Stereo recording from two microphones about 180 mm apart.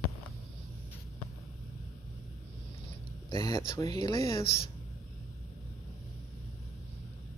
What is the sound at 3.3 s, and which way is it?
Speech, 25° left (ahead or behind).